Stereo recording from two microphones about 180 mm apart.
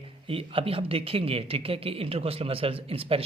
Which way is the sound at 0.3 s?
30° right (ahead or behind).